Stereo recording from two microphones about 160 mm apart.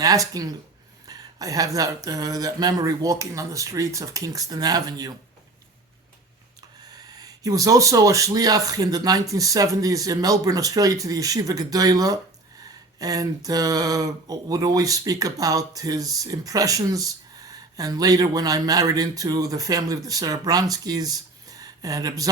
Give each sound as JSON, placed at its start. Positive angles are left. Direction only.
{"t": 0.0, "sound": "speech", "side_deg": -20}
{"t": 7.1, "sound": "speech", "side_deg": -25}